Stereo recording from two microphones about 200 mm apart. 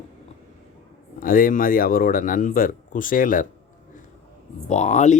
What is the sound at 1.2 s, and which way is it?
Speech, 45° left (ahead or behind).